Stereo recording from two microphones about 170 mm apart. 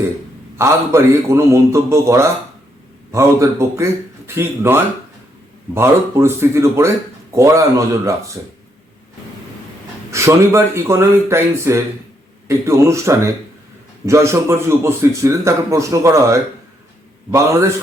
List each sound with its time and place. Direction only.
0.5 s a man's voice: 15° right (ahead or behind)
10.1 s a man's voice: 15° right (ahead or behind)